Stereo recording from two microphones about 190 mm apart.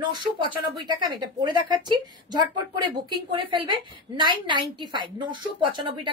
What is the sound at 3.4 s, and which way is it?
A woman's voice, 25° right (ahead or behind).